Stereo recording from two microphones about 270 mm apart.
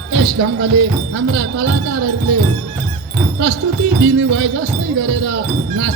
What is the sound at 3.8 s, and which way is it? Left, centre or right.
Music, right.